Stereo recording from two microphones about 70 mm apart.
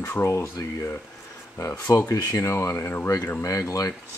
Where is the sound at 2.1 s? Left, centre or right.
Left.